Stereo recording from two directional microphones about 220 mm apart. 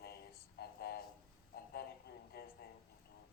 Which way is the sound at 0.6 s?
45° left (ahead or behind).